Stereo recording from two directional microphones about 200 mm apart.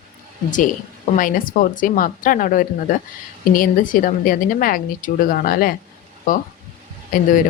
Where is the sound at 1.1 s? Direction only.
45° left (ahead or behind).